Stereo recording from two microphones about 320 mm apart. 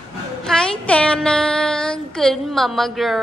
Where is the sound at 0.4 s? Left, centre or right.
Centre.